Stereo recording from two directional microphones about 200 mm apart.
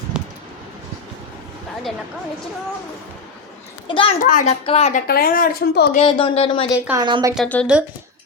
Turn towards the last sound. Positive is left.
turn(degrees=5)  # may be behind; listen again after turning